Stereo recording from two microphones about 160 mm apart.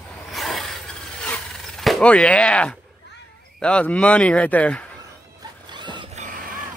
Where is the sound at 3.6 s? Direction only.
5° left (ahead or behind).